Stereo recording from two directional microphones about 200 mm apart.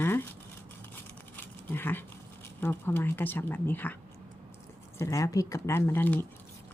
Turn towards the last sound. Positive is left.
turn(degrees=10)  # may be behind; listen again after turning